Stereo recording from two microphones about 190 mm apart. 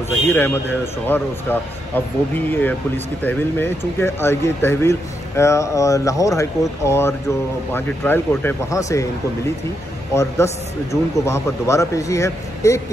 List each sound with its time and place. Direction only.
0.3 s speech: 10° left (ahead or behind)
10.1 s speech: 15° left (ahead or behind)